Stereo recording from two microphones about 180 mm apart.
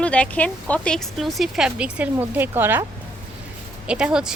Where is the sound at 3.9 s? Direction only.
5° right (ahead or behind).